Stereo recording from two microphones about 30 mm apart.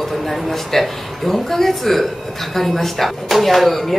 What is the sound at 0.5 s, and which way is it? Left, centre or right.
Speech, centre.